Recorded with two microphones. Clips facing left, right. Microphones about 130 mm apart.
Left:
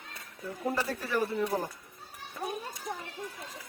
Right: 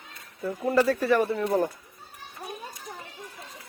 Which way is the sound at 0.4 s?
80° right.